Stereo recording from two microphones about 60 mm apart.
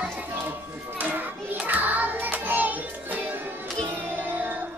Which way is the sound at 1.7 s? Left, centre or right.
Right.